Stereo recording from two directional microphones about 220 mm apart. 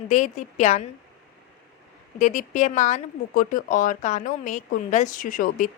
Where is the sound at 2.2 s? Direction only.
35° left (ahead or behind).